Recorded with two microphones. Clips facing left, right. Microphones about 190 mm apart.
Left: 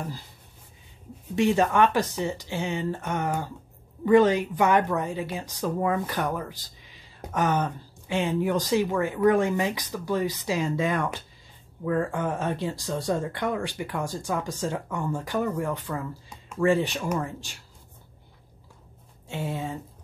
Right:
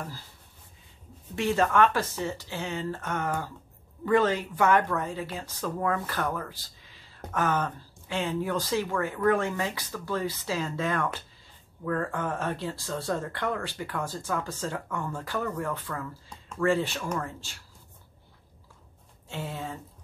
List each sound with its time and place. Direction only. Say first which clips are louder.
1.3 s speech: left 3 dB; 15° left (ahead or behind)
19.2 s speech: left 4 dB; 15° left (ahead or behind)